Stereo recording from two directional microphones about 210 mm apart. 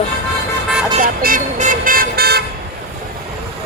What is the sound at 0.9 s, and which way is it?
Vehicle, 40° right (ahead or behind).